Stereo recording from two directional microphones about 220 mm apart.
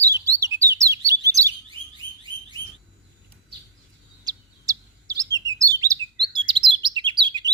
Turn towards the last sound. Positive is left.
turn(degrees=-20)  # may be behind; listen again after turning